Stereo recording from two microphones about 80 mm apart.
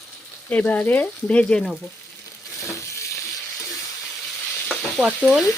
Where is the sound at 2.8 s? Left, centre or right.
Left.